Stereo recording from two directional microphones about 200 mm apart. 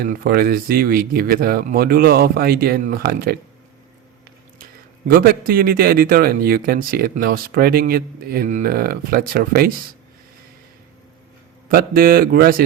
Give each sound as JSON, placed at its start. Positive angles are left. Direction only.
{"t": 0.0, "sound": "speech", "side_deg": -50}
{"t": 4.6, "sound": "a sound", "side_deg": -45}
{"t": 5.5, "sound": "speech", "side_deg": -45}
{"t": 11.7, "sound": "speech", "side_deg": -45}